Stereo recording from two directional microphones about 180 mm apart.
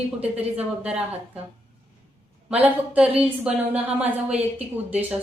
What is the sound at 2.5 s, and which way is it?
A woman's voice, 10° right (ahead or behind).